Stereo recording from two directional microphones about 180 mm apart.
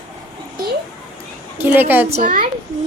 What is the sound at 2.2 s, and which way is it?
Speech, 50° right (ahead or behind).